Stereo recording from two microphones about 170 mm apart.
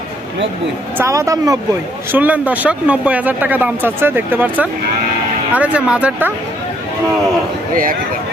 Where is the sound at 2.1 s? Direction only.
10° right (ahead or behind).